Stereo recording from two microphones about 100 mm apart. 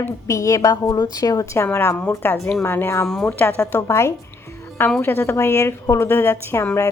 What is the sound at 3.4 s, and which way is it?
A woman's voice, 20° left (ahead or behind).